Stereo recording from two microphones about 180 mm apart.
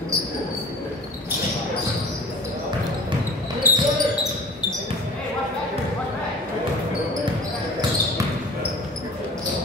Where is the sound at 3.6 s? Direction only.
10° right (ahead or behind).